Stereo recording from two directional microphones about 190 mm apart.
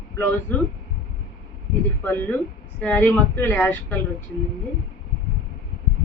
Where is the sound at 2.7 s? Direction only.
5° left (ahead or behind).